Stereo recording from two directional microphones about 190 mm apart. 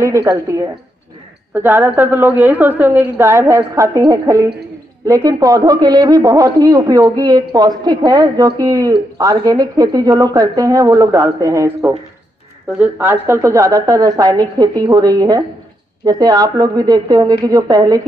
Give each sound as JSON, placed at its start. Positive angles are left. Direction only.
{"t": 0.0, "sound": "a woman's voice", "side_deg": -15}